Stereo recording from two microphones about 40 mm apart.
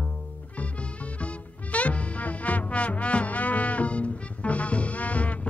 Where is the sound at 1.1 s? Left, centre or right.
Left.